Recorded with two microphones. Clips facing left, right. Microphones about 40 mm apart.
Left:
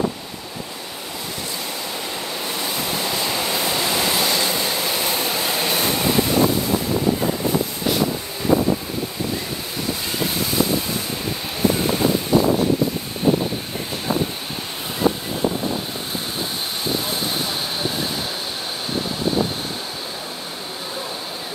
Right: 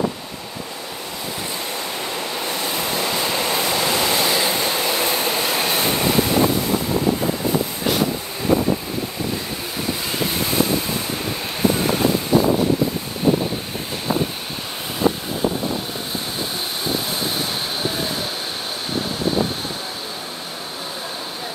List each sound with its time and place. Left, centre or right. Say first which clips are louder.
3.1 s waves: right 2 dB; centre
3.6 s train: right 1 dB; centre
5.6 s vehicle: right 1 dB; centre